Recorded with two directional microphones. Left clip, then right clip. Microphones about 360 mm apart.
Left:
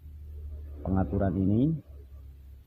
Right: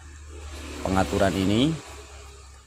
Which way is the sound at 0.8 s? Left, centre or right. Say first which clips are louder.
Right 8 dB; centre.